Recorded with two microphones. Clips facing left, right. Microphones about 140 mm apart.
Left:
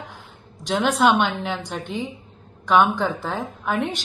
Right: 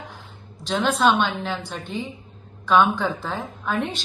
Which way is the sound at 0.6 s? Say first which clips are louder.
Left 1 dB; 15° left (ahead or behind).